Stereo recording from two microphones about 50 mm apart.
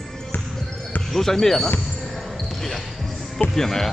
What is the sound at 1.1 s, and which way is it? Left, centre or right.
Speech, centre.